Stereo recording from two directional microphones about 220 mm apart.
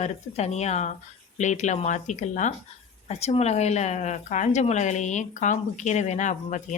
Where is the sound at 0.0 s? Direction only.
30° left (ahead or behind).